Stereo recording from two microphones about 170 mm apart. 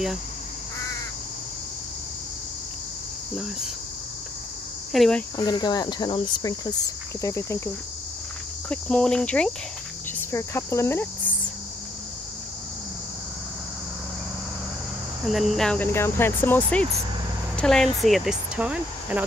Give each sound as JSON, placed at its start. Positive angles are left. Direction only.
{"t": 4.9, "sound": "cricket", "side_deg": 0}
{"t": 5.4, "sound": "speech", "side_deg": 25}
{"t": 8.6, "sound": "cricket", "side_deg": 5}
{"t": 10.3, "sound": "speech", "side_deg": 15}
{"t": 15.2, "sound": "speech", "side_deg": 0}